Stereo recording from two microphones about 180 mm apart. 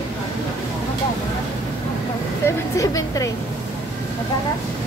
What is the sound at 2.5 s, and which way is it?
Speech, 20° left (ahead or behind).